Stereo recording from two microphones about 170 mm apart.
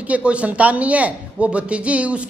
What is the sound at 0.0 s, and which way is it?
A man's voice, 5° right (ahead or behind).